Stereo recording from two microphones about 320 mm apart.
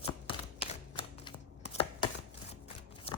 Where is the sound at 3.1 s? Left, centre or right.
Centre.